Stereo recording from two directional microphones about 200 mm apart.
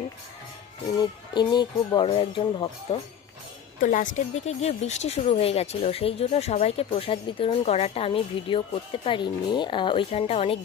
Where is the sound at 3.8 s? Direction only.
40° left (ahead or behind).